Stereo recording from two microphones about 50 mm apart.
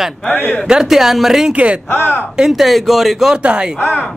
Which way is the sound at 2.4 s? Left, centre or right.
Centre.